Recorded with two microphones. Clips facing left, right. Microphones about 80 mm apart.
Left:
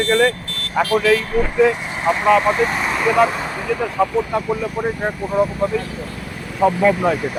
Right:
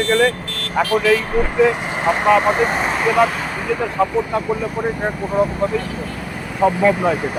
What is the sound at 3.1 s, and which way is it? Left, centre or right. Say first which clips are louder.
Speech: even; centre.